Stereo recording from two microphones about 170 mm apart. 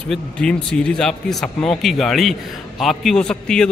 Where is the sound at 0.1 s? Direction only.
5° left (ahead or behind).